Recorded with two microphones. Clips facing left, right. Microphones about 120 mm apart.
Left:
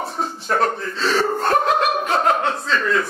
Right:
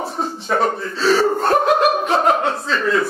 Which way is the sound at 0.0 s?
Centre (ahead or behind).